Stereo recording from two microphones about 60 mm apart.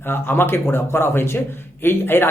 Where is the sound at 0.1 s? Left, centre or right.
Left.